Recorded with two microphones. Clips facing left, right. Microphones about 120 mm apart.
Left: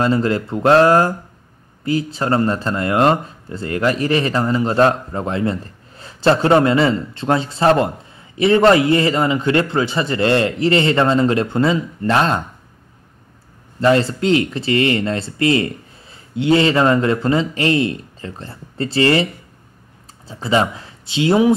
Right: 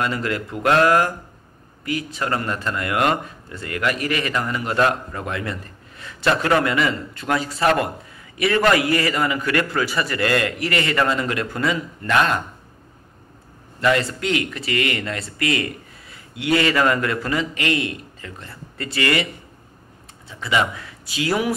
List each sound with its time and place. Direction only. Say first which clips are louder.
0.0 s speech: left 7 dB; 30° left (ahead or behind)
13.7 s speech: left 5 dB; 30° left (ahead or behind)
20.2 s speech: left 4 dB; 30° left (ahead or behind)